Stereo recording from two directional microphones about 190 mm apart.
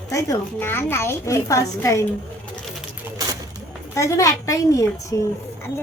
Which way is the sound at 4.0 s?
15° left (ahead or behind).